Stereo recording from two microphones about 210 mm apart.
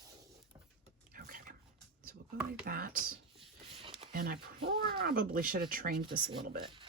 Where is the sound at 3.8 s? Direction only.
25° right (ahead or behind).